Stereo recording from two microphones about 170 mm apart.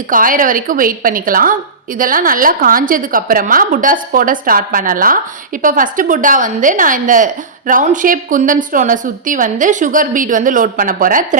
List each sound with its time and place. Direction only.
0.1 s a woman's voice: 55° right (ahead or behind)